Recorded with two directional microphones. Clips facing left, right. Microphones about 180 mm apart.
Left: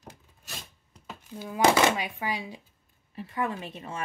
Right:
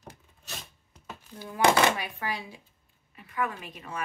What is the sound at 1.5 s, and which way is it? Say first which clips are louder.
Speech: left 1 dB; 15° left (ahead or behind).